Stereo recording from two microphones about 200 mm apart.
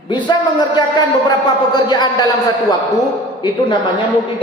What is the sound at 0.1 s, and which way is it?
Speech, 25° left (ahead or behind).